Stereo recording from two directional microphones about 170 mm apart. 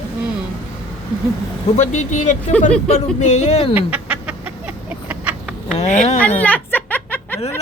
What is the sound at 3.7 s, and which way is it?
Chicken, 10° right (ahead or behind).